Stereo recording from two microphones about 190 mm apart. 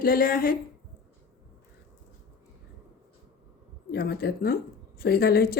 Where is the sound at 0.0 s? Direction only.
50° left (ahead or behind).